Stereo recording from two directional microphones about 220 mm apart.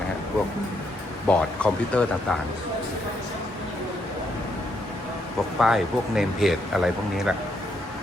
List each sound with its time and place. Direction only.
1.3 s speech: 5° left (ahead or behind)
5.5 s speech: centre (ahead or behind)